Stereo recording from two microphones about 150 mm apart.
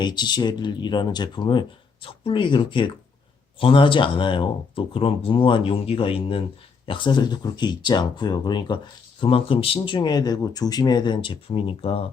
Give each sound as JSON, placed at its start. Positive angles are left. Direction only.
{"t": 0.0, "sound": "speech", "side_deg": 30}